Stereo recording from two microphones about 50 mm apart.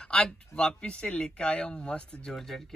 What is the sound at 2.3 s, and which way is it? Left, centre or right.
Speech, centre.